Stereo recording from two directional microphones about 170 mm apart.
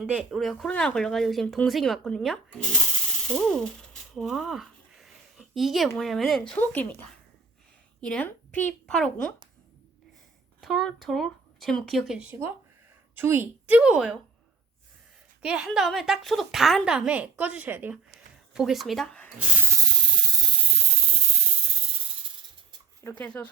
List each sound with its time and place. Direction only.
0.0 s a woman's voice: 5° right (ahead or behind)
3.2 s a sound: 5° left (ahead or behind)
6.0 s a woman's voice: centre (ahead or behind)
10.6 s a woman's voice: centre (ahead or behind)
15.4 s a woman's voice: 5° right (ahead or behind)
19.4 s snake: 15° right (ahead or behind)
23.0 s speech: 10° left (ahead or behind)